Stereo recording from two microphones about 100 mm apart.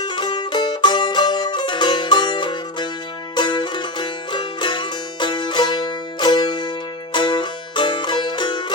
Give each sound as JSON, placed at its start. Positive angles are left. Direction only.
{"t": 0.0, "sound": "music", "side_deg": 50}